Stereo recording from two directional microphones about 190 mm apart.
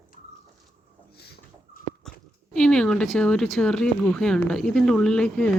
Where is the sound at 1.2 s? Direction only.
55° left (ahead or behind).